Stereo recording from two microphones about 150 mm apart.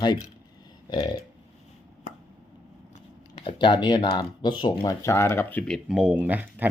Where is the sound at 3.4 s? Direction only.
35° left (ahead or behind); by 5.8 s 15° left (ahead or behind).